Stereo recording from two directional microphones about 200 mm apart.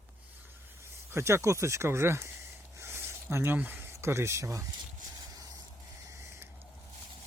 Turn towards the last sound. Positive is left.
turn(degrees=-15)  # may be behind; listen again after turning